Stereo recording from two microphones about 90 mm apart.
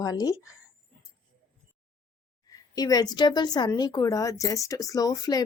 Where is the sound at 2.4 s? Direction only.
45° left (ahead or behind).